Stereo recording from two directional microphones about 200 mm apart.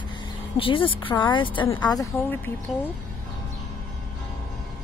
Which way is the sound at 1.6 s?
15° left (ahead or behind).